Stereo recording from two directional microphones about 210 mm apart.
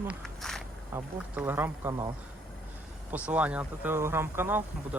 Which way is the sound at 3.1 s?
5° right (ahead or behind).